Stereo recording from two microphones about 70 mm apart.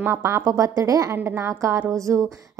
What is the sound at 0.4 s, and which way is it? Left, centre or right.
Speech, right.